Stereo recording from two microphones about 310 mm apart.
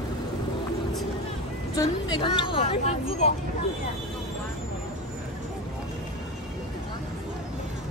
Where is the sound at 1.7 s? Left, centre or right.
Centre.